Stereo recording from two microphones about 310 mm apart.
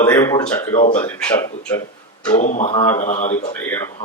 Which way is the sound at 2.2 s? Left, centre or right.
Left.